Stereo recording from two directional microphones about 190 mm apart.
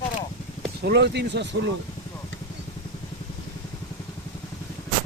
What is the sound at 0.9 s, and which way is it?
Speech, 60° right (ahead or behind).